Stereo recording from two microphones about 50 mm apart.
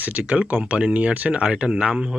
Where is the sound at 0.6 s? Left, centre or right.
Right.